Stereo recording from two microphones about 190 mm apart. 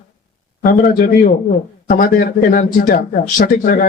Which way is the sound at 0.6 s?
50° left (ahead or behind).